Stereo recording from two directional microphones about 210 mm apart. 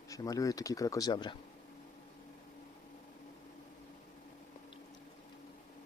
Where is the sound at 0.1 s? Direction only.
15° left (ahead or behind).